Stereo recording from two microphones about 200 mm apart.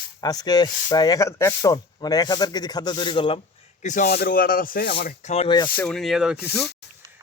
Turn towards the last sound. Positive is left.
turn(degrees=55)  # may be behind; listen again after turning